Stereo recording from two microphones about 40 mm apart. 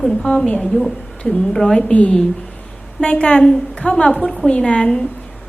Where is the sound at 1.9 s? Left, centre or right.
Left.